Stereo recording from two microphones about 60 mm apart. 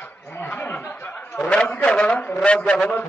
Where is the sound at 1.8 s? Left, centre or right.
Centre.